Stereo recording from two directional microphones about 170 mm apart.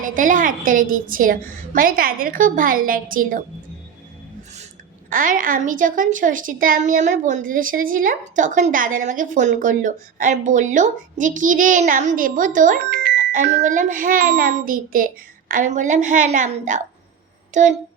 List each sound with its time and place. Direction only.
0.0 s a woman's voice: 50° right (ahead or behind)
5.0 s a woman's voice: 50° right (ahead or behind)
12.9 s a woman's voice: 70° right (ahead or behind); by 17.7 s 45° right (ahead or behind)